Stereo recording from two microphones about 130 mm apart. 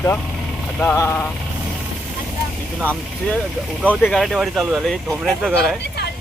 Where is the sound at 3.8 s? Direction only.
5° right (ahead or behind).